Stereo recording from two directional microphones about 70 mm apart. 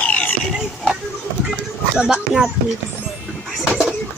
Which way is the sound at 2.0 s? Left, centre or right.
Centre.